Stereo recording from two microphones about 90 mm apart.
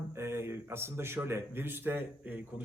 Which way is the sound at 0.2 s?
30° right (ahead or behind).